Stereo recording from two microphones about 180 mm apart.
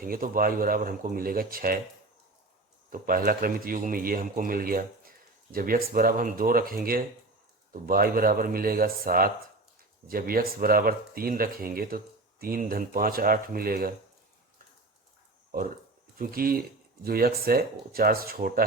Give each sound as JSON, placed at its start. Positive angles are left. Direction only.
{"t": 0.0, "sound": "a man's voice", "side_deg": -50}
{"t": 2.9, "sound": "a man's voice", "side_deg": -50}
{"t": 16.1, "sound": "speech", "side_deg": -55}